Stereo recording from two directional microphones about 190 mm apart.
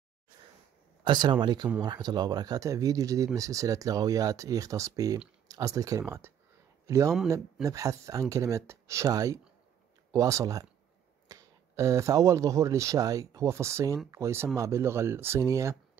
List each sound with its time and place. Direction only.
1.0 s speech: 25° right (ahead or behind)